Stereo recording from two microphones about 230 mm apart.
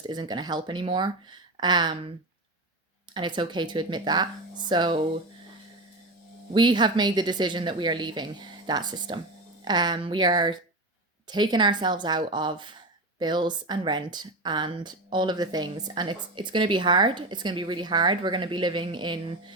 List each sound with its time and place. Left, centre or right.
0.1 s speech: centre
3.2 s speech: centre
6.5 s speech: centre